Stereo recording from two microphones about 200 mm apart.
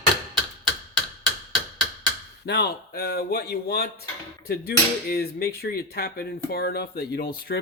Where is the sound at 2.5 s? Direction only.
55° left (ahead or behind).